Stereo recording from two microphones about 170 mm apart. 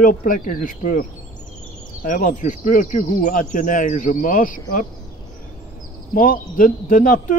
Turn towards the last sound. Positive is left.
turn(degrees=50)  # may be behind; listen again after turning